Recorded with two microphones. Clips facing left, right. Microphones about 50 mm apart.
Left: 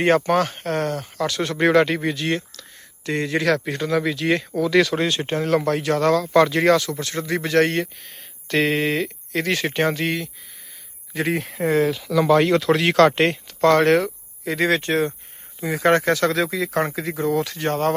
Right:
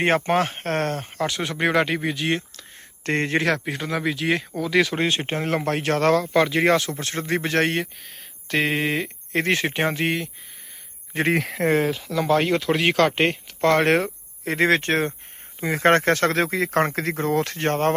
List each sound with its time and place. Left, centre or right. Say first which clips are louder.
0.0 s speech: left 2 dB; right
1.4 s speech: left 5 dB; centre
2.2 s speech: left 1 dB; right
3.0 s speech: even; right
3.6 s speech: left 4 dB; centre
5.0 s speech: left 2 dB; right
6.2 s speech: left 3 dB; centre
6.7 s speech: left 2 dB; right
8.0 s speech: even; centre
9.3 s speech: right 1 dB; right
11.3 s speech: right 3 dB; right
11.9 s speech: left 4 dB; centre
13.6 s speech: left 3 dB; right